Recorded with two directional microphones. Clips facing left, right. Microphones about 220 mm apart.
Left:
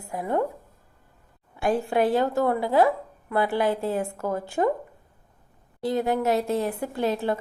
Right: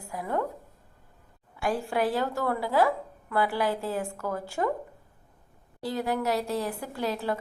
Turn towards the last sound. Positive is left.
turn(degrees=25)  # may be behind; listen again after turning